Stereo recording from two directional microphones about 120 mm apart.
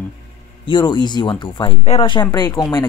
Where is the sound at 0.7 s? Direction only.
40° left (ahead or behind).